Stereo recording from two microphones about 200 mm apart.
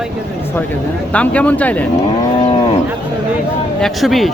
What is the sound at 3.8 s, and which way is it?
Speech, centre (ahead or behind).